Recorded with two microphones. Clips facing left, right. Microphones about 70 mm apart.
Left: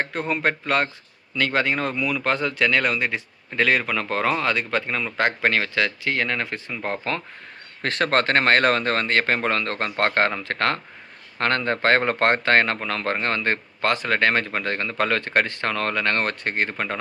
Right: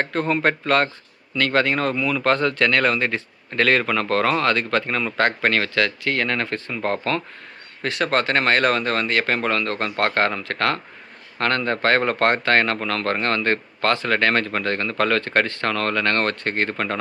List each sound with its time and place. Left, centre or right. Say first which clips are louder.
0.0 s speech: right 3 dB; centre
7.8 s a man's voice: even; left; by 17.0 s centre